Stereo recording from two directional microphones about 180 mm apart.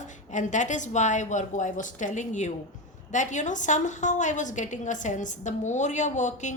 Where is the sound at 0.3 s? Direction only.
45° left (ahead or behind).